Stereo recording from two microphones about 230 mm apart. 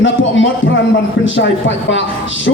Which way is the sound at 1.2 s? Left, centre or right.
Left.